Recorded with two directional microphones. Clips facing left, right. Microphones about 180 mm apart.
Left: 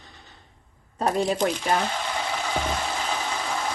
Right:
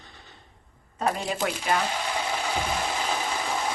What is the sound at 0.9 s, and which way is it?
Speech, 30° left (ahead or behind).